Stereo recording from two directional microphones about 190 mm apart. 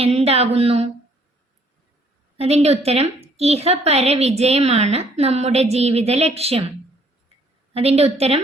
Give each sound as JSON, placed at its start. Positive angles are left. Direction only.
{"t": 0.0, "sound": "a woman's voice", "side_deg": -30}
{"t": 2.4, "sound": "a woman's voice", "side_deg": -35}
{"t": 7.7, "sound": "a woman's voice", "side_deg": -30}